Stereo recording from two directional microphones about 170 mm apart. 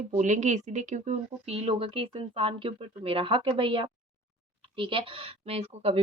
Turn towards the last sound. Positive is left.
turn(degrees=-35)  # may be behind; listen again after turning